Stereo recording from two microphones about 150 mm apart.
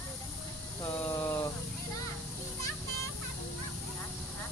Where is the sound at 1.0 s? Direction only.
15° left (ahead or behind).